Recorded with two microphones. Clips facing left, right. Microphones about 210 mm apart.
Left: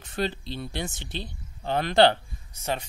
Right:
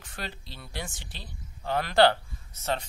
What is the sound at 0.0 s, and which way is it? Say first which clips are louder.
Speech: left 11 dB; 25° left (ahead or behind).